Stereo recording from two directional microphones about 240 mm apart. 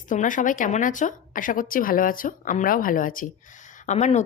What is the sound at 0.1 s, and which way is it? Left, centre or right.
A woman's voice, left.